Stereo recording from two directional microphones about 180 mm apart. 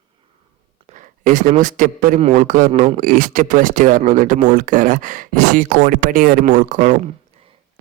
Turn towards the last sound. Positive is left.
turn(degrees=-45)  # may be behind; listen again after turning